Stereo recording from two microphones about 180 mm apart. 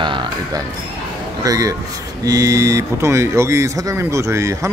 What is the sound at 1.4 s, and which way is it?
Speech, 20° right (ahead or behind).